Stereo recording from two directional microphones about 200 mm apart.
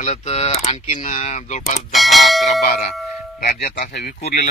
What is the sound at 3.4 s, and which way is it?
Speech, 50° left (ahead or behind).